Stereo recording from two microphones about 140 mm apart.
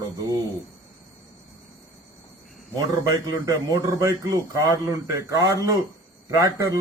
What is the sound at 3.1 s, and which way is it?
Speech, 25° right (ahead or behind).